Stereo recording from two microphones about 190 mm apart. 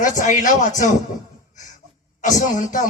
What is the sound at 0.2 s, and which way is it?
Speech, 40° left (ahead or behind).